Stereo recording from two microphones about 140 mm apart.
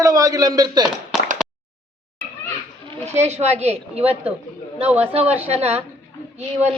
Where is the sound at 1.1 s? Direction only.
Centre (ahead or behind).